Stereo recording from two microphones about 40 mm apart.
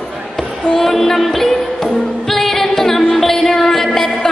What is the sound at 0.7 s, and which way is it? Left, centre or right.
Music, centre.